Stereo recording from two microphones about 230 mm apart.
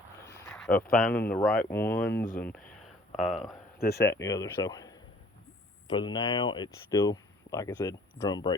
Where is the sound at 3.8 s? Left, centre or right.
Left.